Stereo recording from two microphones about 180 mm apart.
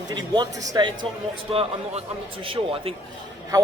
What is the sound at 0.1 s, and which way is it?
Speech, 25° right (ahead or behind).